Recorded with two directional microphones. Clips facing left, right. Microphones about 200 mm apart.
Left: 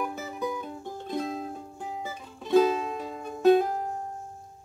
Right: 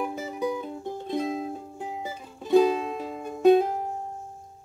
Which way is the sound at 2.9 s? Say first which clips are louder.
Right 2 dB; 5° right (ahead or behind).